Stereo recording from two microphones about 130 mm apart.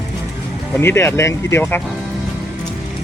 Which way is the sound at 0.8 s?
20° left (ahead or behind).